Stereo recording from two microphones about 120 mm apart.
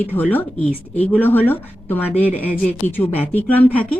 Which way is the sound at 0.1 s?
15° left (ahead or behind).